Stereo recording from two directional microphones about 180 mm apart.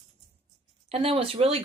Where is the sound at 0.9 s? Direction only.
30° right (ahead or behind).